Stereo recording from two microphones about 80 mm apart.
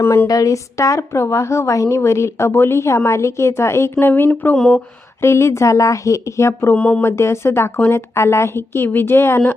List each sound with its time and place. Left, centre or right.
0.0 s speech: left
0.3 s speech: left
5.2 s speech: left
6.7 s a sound: centre
7.0 s speech: left